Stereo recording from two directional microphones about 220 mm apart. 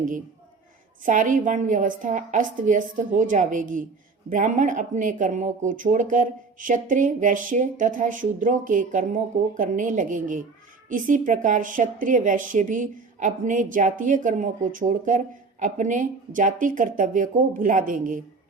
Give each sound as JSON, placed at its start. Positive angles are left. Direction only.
{"t": 1.0, "sound": "speech", "side_deg": -35}